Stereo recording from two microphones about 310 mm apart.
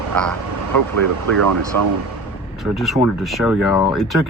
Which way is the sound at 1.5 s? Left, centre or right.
Right.